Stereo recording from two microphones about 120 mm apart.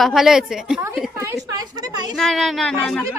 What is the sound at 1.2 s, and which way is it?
Speech, 25° right (ahead or behind).